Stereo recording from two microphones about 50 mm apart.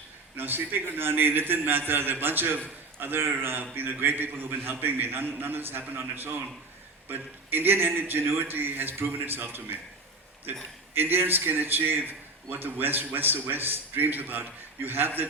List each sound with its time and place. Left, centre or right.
0.3 s a man's voice: right
10.9 s a man's voice: right